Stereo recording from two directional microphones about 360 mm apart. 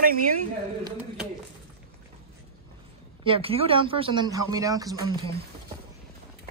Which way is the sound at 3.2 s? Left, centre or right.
Centre.